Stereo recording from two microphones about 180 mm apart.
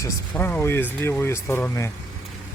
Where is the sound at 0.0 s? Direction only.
10° left (ahead or behind).